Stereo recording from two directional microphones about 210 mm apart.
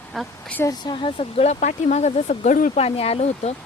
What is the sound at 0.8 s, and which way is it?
Speech, 25° left (ahead or behind).